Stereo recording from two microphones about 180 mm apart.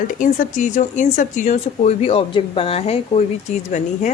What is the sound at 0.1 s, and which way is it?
A woman's voice, 45° left (ahead or behind).